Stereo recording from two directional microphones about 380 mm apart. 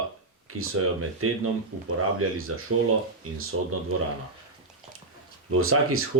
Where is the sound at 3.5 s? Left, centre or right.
Right.